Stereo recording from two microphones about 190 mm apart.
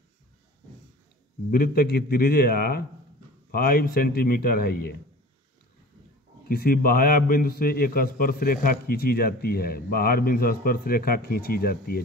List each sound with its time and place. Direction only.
1.5 s a man's voice: 50° left (ahead or behind)
6.5 s a man's voice: 50° left (ahead or behind)